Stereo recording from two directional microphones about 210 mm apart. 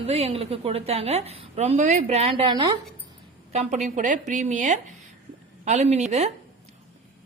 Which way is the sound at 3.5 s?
35° right (ahead or behind).